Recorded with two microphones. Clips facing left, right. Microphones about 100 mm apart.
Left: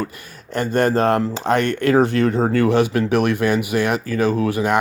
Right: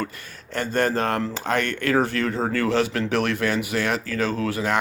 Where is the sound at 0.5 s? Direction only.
15° left (ahead or behind).